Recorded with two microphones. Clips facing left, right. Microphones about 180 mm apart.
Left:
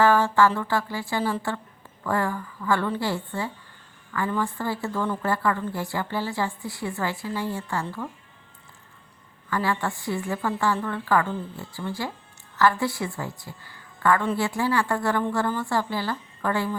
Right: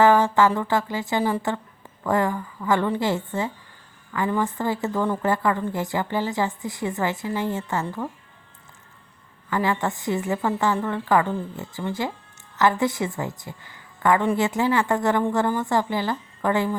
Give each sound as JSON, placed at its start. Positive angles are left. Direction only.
{"t": 0.0, "sound": "a woman's voice", "side_deg": -20}
{"t": 9.5, "sound": "a woman's voice", "side_deg": -20}